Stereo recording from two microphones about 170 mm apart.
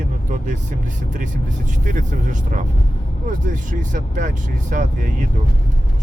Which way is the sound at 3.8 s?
50° right (ahead or behind).